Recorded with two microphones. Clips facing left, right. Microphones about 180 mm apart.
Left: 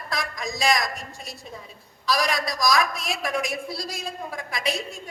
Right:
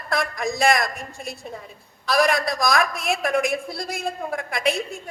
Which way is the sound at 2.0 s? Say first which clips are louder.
Right 5 dB; 55° right (ahead or behind).